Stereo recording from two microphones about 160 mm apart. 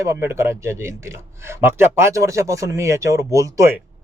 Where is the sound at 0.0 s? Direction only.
15° right (ahead or behind).